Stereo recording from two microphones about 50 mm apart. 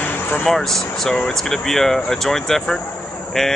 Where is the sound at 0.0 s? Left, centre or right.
Left.